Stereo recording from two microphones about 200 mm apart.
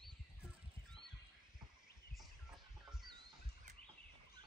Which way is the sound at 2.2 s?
Centre (ahead or behind).